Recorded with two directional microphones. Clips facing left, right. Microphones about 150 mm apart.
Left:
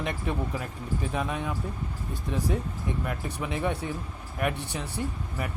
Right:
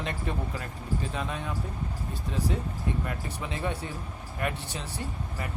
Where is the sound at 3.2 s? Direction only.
15° left (ahead or behind).